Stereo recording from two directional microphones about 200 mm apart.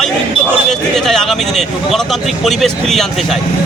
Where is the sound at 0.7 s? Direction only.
Centre (ahead or behind).